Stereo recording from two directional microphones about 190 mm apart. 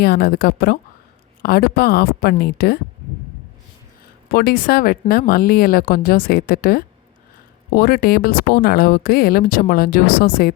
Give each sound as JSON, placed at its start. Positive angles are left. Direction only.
{"t": 0.0, "sound": "a woman's voice", "side_deg": 55}
{"t": 4.3, "sound": "speech", "side_deg": 55}